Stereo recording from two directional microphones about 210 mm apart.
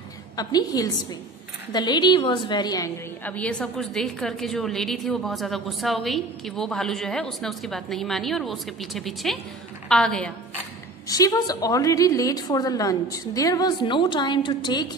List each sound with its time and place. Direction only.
0.4 s a woman's voice: 20° left (ahead or behind)
11.1 s a woman's voice: 15° left (ahead or behind)